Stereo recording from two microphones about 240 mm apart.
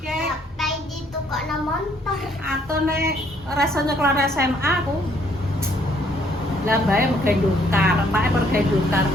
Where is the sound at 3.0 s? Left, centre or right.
Right.